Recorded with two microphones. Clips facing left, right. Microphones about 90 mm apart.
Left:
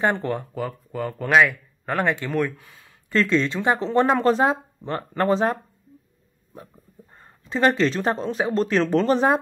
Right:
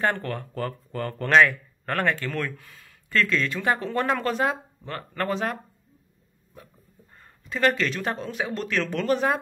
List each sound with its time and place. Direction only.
0.0 s speech: 20° left (ahead or behind)
0.6 s speech: 5° left (ahead or behind); by 5.6 s 30° left (ahead or behind)
7.2 s speech: 30° left (ahead or behind)